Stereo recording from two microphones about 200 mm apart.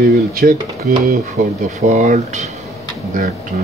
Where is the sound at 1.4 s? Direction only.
35° right (ahead or behind).